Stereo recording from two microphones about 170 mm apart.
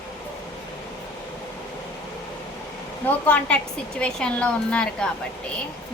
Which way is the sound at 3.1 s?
10° left (ahead or behind).